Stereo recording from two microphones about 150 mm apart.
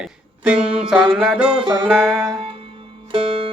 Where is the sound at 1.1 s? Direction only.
5° right (ahead or behind).